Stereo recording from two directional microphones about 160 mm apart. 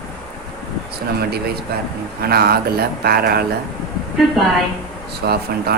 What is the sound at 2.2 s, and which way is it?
Speech, 75° right (ahead or behind).